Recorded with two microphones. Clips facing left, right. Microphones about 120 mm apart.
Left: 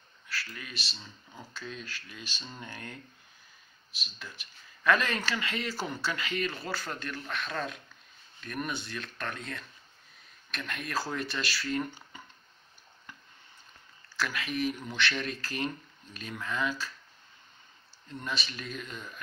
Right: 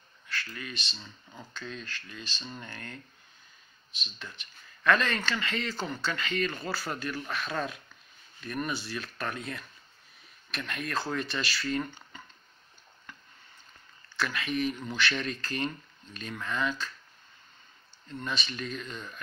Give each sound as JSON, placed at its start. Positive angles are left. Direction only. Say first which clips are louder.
{"t": 0.3, "sound": "speech", "louder": "right 2 dB", "side_deg": 5}
{"t": 14.0, "sound": "speech", "louder": "right 1 dB", "side_deg": 5}
{"t": 18.1, "sound": "speech", "louder": "right 1 dB", "side_deg": 5}